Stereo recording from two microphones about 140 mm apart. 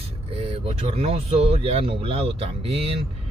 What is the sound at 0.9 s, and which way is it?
Speech, 45° right (ahead or behind).